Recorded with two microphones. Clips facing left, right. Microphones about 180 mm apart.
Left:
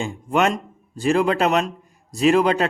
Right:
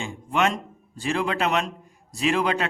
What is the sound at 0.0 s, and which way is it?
A man's voice, 45° left (ahead or behind).